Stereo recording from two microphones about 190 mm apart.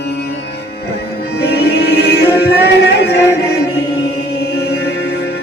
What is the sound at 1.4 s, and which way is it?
Music, 60° left (ahead or behind).